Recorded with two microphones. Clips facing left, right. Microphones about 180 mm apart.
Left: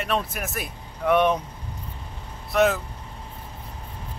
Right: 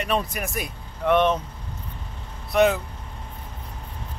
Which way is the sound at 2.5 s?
Centre (ahead or behind).